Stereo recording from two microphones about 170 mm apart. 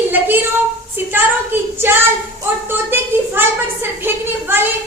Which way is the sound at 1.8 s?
15° right (ahead or behind).